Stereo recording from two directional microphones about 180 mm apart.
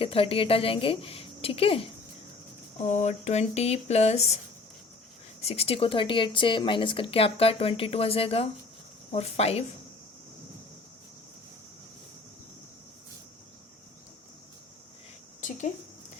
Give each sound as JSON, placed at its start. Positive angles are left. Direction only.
{"t": 0.0, "sound": "speech", "side_deg": 30}
{"t": 5.4, "sound": "speech", "side_deg": 35}
{"t": 15.4, "sound": "a sound", "side_deg": 45}